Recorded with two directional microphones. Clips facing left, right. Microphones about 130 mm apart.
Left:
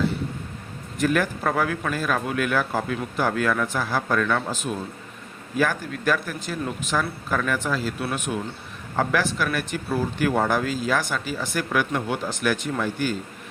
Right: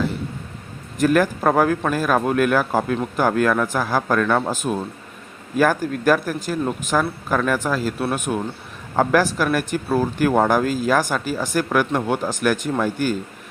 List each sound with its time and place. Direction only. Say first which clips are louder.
0.9 s a man's voice: right 5 dB; 45° right (ahead or behind)